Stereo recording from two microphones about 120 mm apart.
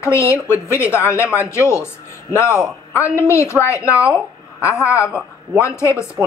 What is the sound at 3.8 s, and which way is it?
Speech, 10° right (ahead or behind).